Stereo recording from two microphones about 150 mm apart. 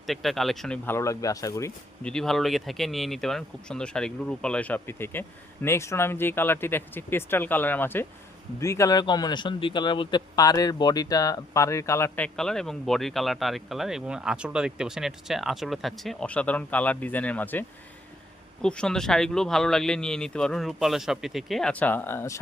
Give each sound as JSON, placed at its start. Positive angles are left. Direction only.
{"t": 0.0, "sound": "speech", "side_deg": 0}
{"t": 0.9, "sound": "speech", "side_deg": 20}
{"t": 2.0, "sound": "a man's voice", "side_deg": 5}